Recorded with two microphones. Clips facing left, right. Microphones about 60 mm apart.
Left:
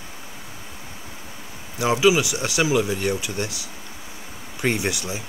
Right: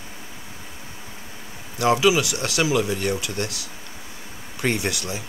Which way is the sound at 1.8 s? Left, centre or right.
Centre.